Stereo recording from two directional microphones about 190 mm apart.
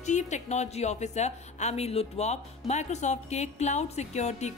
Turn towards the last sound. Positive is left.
turn(degrees=35)  # may be behind; listen again after turning